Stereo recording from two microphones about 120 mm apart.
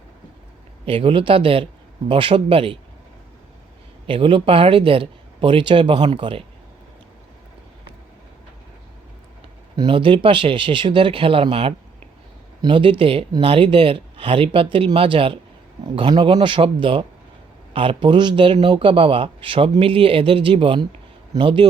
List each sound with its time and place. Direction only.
0.9 s speech: 45° right (ahead or behind)
4.0 s speech: 45° right (ahead or behind)
9.7 s speech: 40° right (ahead or behind)